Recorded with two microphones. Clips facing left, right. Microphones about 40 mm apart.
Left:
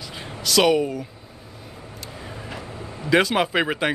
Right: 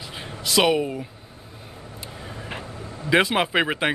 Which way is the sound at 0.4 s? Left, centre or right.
Centre.